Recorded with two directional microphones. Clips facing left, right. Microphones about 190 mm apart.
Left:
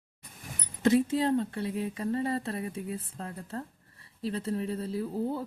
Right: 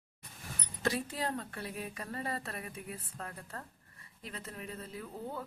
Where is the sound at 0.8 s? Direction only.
20° left (ahead or behind).